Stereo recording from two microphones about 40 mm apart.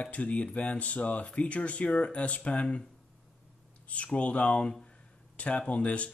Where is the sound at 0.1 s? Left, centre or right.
Left.